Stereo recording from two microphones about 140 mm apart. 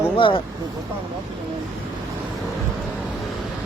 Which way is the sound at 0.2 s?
35° left (ahead or behind).